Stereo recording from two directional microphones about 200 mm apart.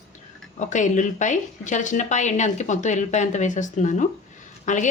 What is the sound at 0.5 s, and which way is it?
A woman's voice, 35° left (ahead or behind).